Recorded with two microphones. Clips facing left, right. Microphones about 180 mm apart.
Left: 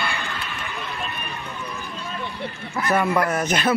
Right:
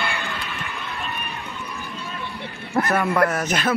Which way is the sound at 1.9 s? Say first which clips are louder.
Left 1 dB; 15° left (ahead or behind).